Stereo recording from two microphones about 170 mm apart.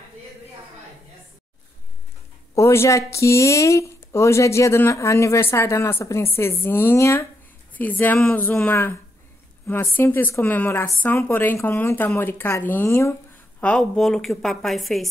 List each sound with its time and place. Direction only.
2.5 s a woman's voice: 15° left (ahead or behind); by 15.0 s centre (ahead or behind)